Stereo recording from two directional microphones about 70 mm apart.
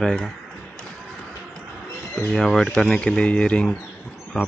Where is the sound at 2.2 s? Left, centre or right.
Centre.